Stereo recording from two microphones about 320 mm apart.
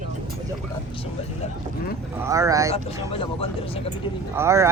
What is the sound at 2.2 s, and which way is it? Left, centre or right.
Speech, centre.